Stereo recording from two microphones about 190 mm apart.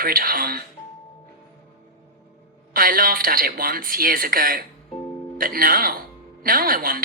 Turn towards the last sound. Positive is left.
turn(degrees=-50)  # may be behind; listen again after turning